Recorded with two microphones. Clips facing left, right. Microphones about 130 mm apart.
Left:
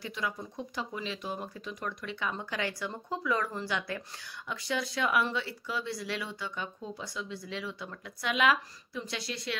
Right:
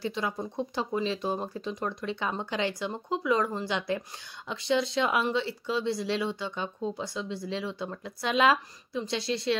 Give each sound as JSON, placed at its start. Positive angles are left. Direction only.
{"t": 0.0, "sound": "speech", "side_deg": -30}